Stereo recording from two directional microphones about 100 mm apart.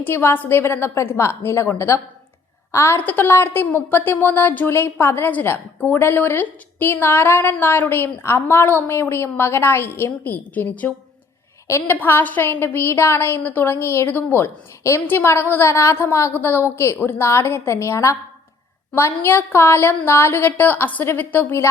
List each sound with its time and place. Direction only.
0.0 s a woman's voice: 25° left (ahead or behind)